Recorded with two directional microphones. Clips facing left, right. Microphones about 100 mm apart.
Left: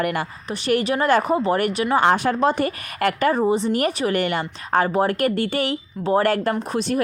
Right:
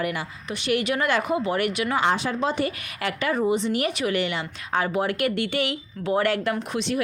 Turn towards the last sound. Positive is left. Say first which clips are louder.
# left 4 dB
turn(degrees=40)  # may be behind; listen again after turning